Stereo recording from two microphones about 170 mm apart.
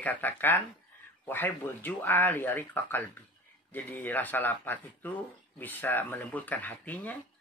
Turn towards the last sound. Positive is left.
turn(degrees=10)  # may be behind; listen again after turning